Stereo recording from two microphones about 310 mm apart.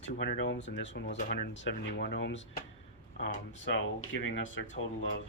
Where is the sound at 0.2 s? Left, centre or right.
Left.